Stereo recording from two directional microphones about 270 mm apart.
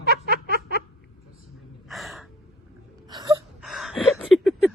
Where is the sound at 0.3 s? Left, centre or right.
Left.